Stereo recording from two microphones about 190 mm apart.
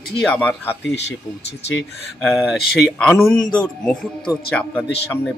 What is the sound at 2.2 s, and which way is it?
A man's voice, centre (ahead or behind).